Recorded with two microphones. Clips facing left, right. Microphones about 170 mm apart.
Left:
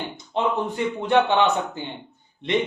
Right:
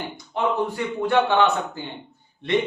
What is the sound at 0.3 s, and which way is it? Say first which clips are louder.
A man's voice: even; 20° left (ahead or behind).